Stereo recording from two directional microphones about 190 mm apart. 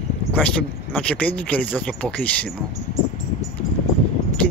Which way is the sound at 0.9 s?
5° left (ahead or behind).